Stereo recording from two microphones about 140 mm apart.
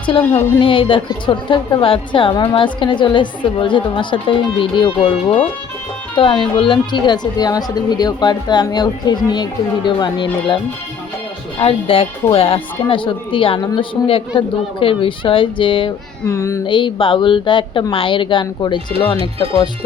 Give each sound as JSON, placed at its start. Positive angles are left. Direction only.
{"t": 0.6, "sound": "a woman's voice", "side_deg": 35}
{"t": 6.1, "sound": "a woman's voice", "side_deg": 35}
{"t": 11.6, "sound": "a woman's voice", "side_deg": 40}
{"t": 16.2, "sound": "speech", "side_deg": 25}
{"t": 16.6, "sound": "a woman's voice", "side_deg": 35}